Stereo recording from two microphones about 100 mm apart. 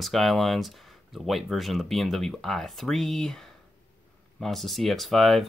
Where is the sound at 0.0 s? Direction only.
Centre (ahead or behind).